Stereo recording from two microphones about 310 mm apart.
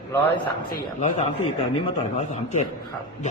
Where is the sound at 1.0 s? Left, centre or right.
Left.